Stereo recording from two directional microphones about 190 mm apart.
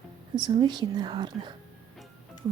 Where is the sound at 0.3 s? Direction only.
20° right (ahead or behind).